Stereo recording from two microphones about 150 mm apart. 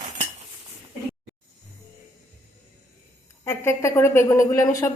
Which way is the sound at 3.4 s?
20° left (ahead or behind).